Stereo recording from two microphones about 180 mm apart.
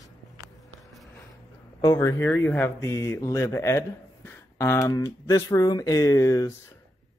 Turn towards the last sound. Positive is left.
turn(degrees=20)  # may be behind; listen again after turning